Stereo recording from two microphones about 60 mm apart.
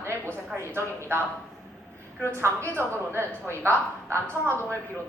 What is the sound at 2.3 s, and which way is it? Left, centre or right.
A woman's voice, right.